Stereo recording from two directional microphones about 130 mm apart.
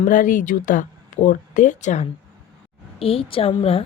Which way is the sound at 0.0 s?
90° left.